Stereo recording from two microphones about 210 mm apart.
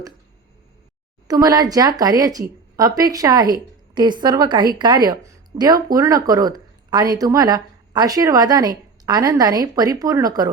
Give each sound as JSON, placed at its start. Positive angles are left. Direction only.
{"t": 1.3, "sound": "a woman's voice", "side_deg": -15}